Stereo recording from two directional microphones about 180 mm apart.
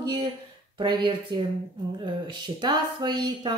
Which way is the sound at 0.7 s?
25° right (ahead or behind).